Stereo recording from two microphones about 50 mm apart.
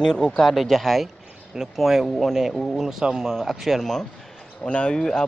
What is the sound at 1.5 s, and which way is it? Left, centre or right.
Speech, centre.